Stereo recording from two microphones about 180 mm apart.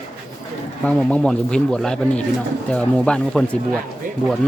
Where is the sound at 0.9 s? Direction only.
5° left (ahead or behind).